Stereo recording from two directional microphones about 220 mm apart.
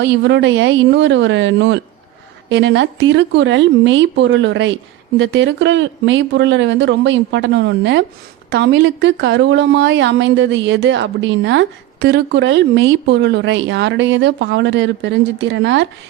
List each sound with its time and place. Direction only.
0.0 s a woman's voice: 55° right (ahead or behind)